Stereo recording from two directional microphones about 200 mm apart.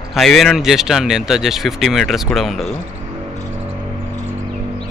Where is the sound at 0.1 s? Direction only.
Centre (ahead or behind).